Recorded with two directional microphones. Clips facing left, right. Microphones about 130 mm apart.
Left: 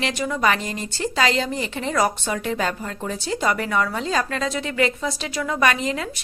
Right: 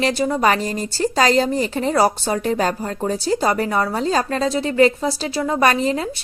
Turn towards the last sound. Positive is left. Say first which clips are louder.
# right 4 dB
turn(degrees=-35)  # may be behind; listen again after turning